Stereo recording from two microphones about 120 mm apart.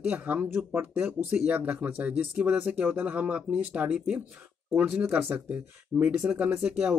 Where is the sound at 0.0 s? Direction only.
15° right (ahead or behind).